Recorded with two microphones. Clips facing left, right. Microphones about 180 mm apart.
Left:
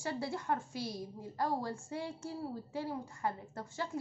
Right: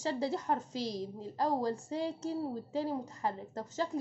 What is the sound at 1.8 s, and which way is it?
Speech, 20° right (ahead or behind).